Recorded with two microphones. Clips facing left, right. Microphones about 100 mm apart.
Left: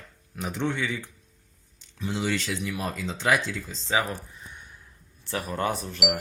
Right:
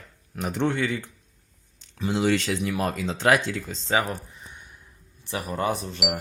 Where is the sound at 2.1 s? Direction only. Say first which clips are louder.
Right 5 dB; 50° right (ahead or behind).